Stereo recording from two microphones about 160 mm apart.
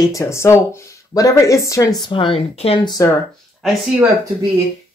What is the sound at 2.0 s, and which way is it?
Speech, 30° left (ahead or behind).